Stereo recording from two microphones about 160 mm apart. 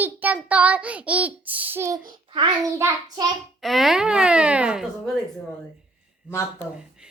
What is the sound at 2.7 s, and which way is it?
Speech, 15° right (ahead or behind).